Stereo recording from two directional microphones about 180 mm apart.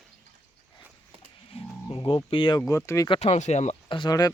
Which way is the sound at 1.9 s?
30° left (ahead or behind).